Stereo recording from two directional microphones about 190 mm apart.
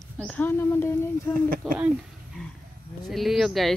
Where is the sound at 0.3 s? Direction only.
10° left (ahead or behind).